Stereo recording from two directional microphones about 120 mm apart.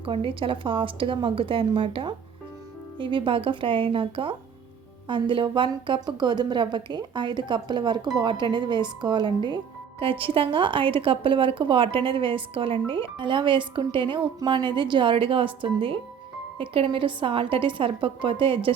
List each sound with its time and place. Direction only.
0.0 s a woman's voice: 45° right (ahead or behind)